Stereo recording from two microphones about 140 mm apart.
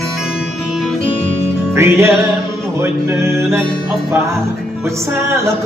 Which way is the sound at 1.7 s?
20° right (ahead or behind).